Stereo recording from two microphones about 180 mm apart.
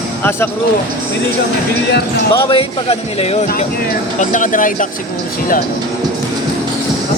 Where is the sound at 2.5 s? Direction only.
30° left (ahead or behind).